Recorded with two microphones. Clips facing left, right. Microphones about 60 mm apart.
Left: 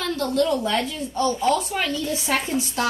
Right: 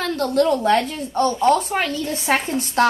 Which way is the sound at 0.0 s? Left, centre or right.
Right.